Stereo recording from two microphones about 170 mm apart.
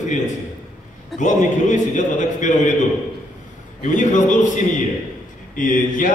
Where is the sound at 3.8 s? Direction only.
45° left (ahead or behind).